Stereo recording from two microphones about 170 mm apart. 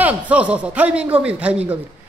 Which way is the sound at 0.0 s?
10° right (ahead or behind).